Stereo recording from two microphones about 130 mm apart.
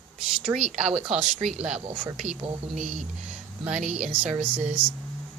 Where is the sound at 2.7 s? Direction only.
65° right (ahead or behind).